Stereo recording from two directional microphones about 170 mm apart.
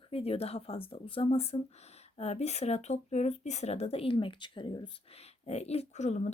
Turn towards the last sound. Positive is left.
turn(degrees=40)  # may be behind; listen again after turning